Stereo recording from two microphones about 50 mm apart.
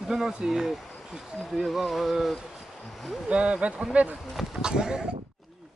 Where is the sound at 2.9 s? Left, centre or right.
Centre.